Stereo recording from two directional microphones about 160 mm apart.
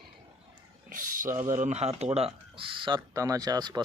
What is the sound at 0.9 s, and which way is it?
Speech, 60° right (ahead or behind).